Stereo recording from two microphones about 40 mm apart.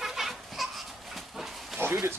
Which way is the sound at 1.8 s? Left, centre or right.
Right.